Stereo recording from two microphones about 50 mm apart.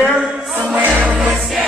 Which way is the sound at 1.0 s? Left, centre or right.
Centre.